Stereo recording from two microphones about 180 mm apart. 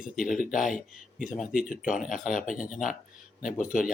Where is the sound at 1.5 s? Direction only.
50° left (ahead or behind).